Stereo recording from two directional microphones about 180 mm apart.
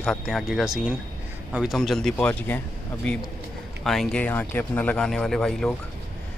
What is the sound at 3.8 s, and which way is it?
Speech, centre (ahead or behind).